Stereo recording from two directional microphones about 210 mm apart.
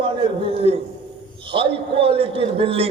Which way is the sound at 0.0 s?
25° right (ahead or behind).